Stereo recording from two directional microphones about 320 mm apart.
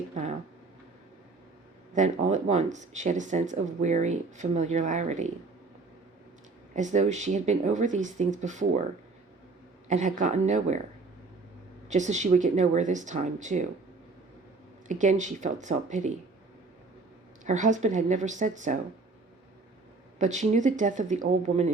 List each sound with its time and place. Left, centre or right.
1.9 s speech: right
6.7 s speech: right
9.9 s speech: right
11.9 s speech: right
14.8 s speech: right
17.4 s speech: right
20.1 s speech: right